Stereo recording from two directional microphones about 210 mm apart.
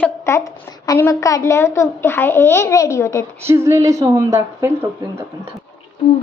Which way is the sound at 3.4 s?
10° right (ahead or behind).